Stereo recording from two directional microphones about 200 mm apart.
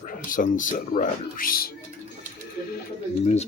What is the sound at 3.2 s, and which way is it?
Speech, 30° left (ahead or behind).